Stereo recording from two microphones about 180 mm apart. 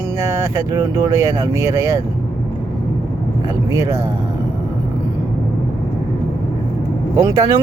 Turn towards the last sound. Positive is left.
turn(degrees=-20)  # may be behind; listen again after turning